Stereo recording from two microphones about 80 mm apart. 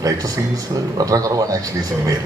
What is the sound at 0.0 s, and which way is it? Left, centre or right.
A woman's voice, right.